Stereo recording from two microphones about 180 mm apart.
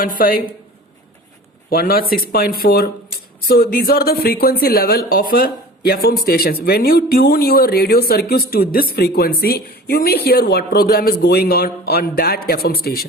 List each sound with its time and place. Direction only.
0.0 s a woman's voice: 55° left (ahead or behind)
1.7 s speech: 55° left (ahead or behind)